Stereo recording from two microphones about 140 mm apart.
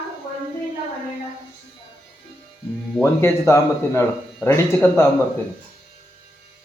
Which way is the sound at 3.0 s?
20° left (ahead or behind).